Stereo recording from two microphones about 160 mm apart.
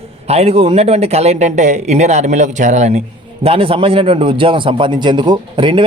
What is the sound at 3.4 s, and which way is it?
A man's voice, 35° right (ahead or behind).